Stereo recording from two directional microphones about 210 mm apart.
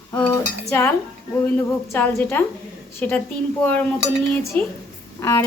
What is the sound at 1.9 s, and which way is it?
Speech, 10° left (ahead or behind).